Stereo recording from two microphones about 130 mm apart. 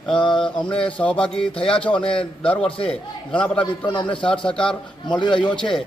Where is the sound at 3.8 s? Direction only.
40° left (ahead or behind).